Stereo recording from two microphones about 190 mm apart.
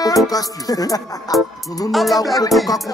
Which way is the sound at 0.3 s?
20° left (ahead or behind).